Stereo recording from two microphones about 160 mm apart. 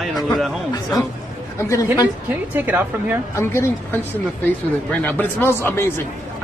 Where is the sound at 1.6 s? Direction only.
20° left (ahead or behind).